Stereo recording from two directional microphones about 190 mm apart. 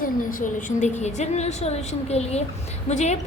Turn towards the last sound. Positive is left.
turn(degrees=35)  # may be behind; listen again after turning